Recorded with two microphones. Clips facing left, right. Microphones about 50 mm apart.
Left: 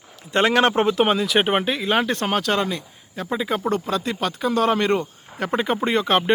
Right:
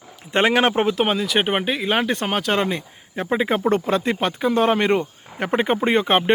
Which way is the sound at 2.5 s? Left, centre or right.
Right.